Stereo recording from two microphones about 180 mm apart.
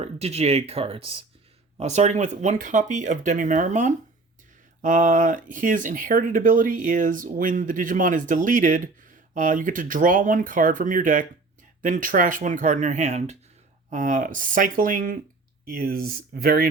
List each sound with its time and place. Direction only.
0.0 s speech: 35° right (ahead or behind); by 16.6 s 55° right (ahead or behind)